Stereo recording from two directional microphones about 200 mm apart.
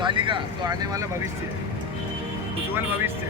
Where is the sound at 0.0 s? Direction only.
25° right (ahead or behind).